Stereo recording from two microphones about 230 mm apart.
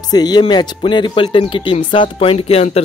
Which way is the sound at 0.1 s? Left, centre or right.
Centre.